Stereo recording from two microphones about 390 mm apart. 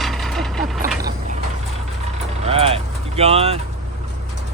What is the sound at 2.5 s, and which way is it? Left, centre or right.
Vehicle, centre.